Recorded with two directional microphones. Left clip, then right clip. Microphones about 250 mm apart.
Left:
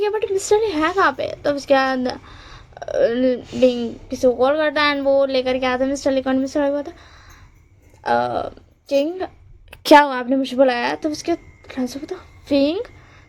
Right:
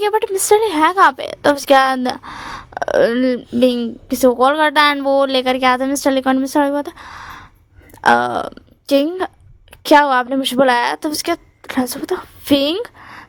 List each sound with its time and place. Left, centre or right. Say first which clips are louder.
0.0 s a woman's voice: right 4 dB; right
9.8 s a woman's voice: right 1 dB; centre
10.2 s a woman's voice: right 2 dB; right